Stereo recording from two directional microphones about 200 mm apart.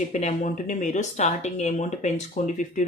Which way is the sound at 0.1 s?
35° left (ahead or behind).